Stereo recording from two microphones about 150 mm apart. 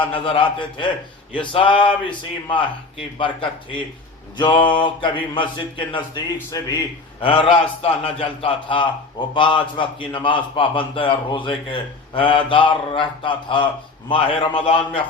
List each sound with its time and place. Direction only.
0.0 s speech: 35° left (ahead or behind)